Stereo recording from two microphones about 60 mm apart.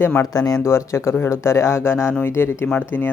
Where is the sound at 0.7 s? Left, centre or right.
Left.